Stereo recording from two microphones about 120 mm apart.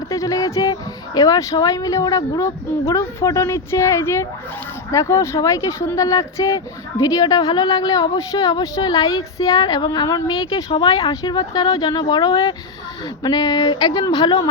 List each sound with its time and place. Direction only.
0.1 s a woman's voice: 25° left (ahead or behind)